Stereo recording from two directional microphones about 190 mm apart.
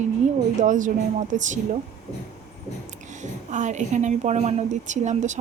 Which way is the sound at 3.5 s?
40° right (ahead or behind).